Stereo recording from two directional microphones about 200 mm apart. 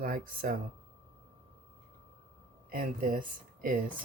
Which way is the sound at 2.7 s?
45° right (ahead or behind).